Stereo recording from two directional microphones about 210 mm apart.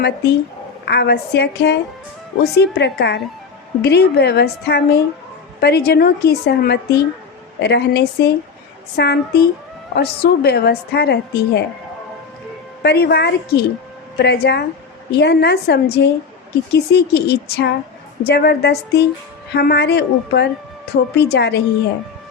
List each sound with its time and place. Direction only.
0.9 s a woman's voice: 50° left (ahead or behind)
12.8 s a woman's voice: 50° left (ahead or behind)